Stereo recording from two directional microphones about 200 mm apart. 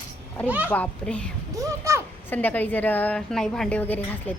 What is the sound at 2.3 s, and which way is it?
Speech, 10° left (ahead or behind).